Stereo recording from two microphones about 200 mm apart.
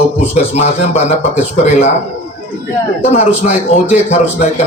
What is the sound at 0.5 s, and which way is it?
Speech, 35° left (ahead or behind).